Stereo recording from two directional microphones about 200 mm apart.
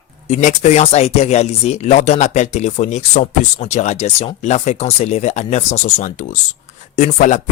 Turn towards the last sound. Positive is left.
turn(degrees=40)  # may be behind; listen again after turning